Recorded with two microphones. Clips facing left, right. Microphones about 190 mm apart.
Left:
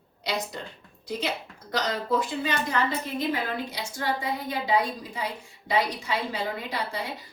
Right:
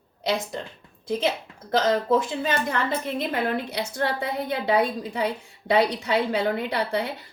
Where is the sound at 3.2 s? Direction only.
60° right (ahead or behind).